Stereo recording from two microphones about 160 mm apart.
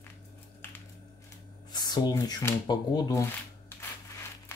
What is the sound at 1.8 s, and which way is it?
Speech, 25° left (ahead or behind).